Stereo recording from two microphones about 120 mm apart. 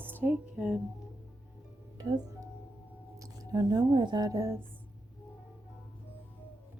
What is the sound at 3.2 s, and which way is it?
Speech, 35° right (ahead or behind).